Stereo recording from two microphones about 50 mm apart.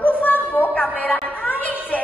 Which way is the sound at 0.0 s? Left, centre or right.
Left.